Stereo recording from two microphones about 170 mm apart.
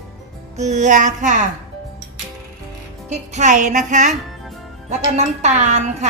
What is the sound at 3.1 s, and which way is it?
A woman's voice, 45° right (ahead or behind).